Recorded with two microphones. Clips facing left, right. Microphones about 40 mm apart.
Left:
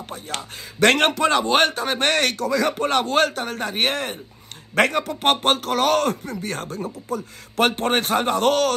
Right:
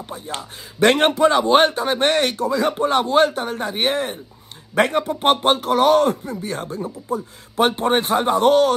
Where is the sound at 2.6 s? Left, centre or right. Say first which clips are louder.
Right 1 dB; right.